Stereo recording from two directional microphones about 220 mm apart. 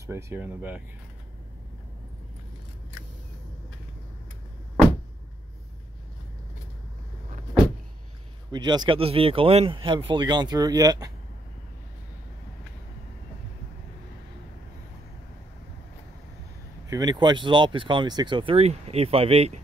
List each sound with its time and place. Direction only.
0.0 s speech: 10° right (ahead or behind)
8.5 s speech: 20° right (ahead or behind)
16.9 s speech: 20° right (ahead or behind)